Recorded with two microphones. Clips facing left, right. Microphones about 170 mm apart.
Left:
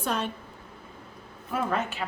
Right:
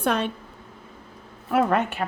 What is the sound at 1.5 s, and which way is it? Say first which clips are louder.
Speech: right 7 dB; 60° right (ahead or behind).